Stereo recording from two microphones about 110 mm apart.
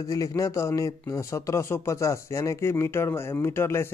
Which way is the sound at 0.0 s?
30° left (ahead or behind).